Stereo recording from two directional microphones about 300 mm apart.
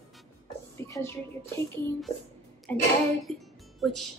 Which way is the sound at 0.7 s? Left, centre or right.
Centre.